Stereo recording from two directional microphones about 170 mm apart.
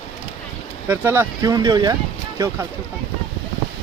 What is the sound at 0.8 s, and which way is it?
Speech, 15° right (ahead or behind).